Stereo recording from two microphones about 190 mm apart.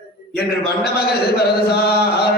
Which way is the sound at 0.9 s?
55° left (ahead or behind).